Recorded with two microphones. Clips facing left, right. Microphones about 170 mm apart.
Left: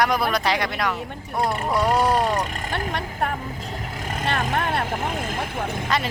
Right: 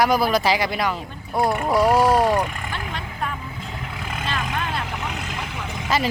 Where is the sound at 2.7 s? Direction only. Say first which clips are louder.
Left 4 dB; 55° left (ahead or behind).